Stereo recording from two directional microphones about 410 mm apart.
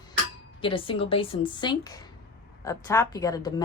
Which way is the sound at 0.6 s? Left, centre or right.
Centre.